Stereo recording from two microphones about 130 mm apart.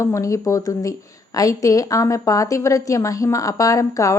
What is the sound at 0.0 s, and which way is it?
A woman's voice, 25° left (ahead or behind).